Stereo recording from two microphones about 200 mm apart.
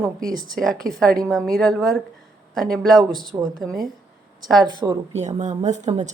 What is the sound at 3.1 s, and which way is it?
Speech, 20° right (ahead or behind).